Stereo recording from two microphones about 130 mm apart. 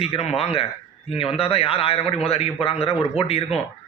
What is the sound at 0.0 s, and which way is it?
A man's voice, 50° left (ahead or behind).